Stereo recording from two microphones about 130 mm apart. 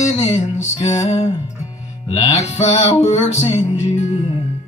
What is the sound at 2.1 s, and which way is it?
Music, 60° left (ahead or behind).